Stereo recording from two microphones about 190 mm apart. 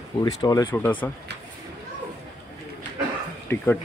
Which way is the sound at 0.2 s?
20° left (ahead or behind).